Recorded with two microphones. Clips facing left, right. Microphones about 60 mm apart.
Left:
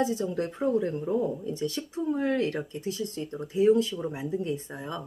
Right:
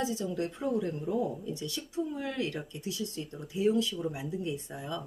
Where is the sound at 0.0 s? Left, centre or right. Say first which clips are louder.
Left 5 dB; left.